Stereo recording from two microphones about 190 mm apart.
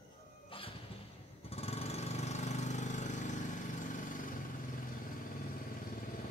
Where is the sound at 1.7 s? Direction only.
35° left (ahead or behind).